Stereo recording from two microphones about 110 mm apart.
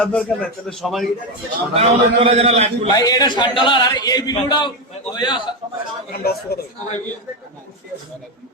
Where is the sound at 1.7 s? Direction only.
60° right (ahead or behind).